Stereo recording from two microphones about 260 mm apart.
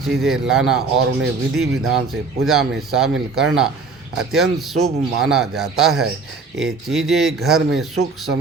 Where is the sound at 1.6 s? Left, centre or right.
Right.